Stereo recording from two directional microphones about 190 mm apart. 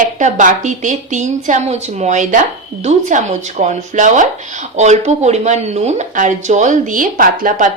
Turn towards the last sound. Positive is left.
turn(degrees=-45)  # may be behind; listen again after turning